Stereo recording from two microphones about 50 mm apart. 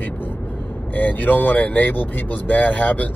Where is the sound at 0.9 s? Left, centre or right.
Left.